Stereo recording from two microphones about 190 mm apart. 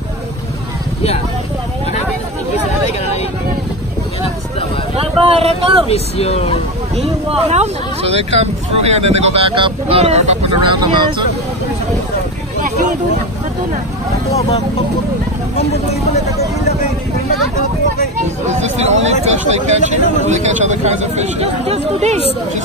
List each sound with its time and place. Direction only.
4.9 s speech: 30° right (ahead or behind)
5.9 s speech: 30° left (ahead or behind)
7.2 s speech: 35° right (ahead or behind)
18.6 s speech: 35° right (ahead or behind)